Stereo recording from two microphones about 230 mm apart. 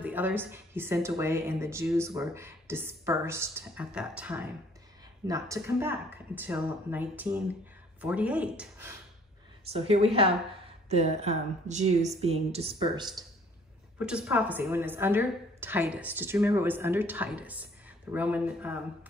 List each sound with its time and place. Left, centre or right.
0.0 s a woman's voice: centre
9.7 s speech: right
13.9 s a woman's voice: centre